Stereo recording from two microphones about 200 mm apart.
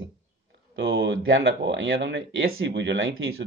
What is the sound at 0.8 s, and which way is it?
Speech, 60° right (ahead or behind).